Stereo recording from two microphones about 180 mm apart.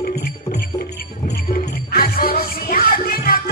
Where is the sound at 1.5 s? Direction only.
55° left (ahead or behind).